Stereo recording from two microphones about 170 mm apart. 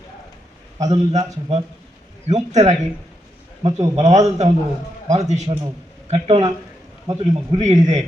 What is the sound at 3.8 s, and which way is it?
Speech, 40° right (ahead or behind).